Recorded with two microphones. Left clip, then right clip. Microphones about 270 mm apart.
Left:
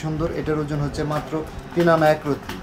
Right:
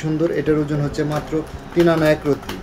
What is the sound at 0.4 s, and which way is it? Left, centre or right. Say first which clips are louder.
Speech: right 5 dB; centre.